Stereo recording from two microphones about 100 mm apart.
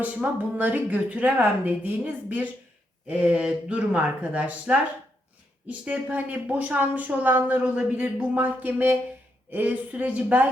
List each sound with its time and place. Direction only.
0.0 s speech: 15° right (ahead or behind)